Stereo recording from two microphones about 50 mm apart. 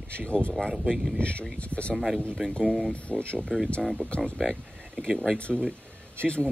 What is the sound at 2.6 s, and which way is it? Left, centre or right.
Speech, right.